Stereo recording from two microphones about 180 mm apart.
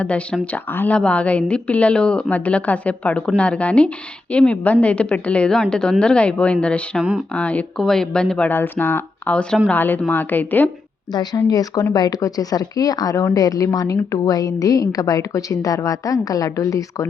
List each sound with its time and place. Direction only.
0.0 s a woman's voice: 5° left (ahead or behind)
11.1 s a woman's voice: 25° left (ahead or behind)